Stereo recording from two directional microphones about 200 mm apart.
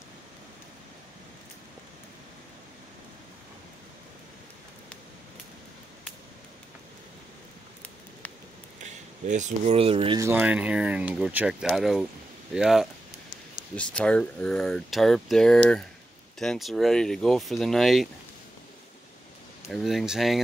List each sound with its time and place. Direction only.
8.8 s speech: 35° right (ahead or behind)
10.2 s speech: 5° right (ahead or behind)
19.7 s speech: centre (ahead or behind)